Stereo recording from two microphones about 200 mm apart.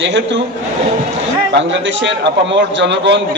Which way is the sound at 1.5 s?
65° right (ahead or behind).